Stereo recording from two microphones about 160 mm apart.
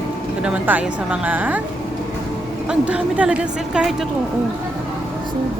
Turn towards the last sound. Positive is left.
turn(degrees=-5)  # may be behind; listen again after turning